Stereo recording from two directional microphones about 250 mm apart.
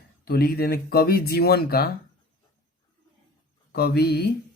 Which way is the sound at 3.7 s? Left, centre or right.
Left.